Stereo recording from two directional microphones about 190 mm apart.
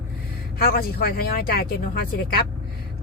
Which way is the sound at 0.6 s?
50° left (ahead or behind).